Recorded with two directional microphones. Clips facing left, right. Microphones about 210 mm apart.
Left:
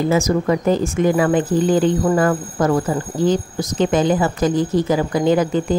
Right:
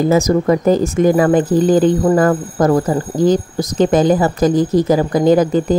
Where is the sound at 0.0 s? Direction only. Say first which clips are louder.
Right 4 dB; 40° right (ahead or behind).